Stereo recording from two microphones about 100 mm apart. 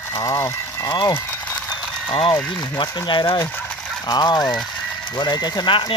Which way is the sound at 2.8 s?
50° left (ahead or behind).